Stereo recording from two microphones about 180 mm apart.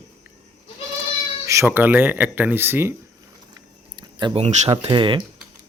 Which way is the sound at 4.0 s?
25° right (ahead or behind).